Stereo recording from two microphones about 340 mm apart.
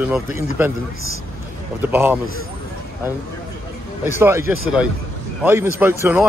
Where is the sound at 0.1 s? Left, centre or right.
Centre.